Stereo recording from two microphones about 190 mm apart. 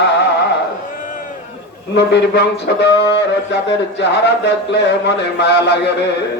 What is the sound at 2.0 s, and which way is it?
Speech, 65° left (ahead or behind).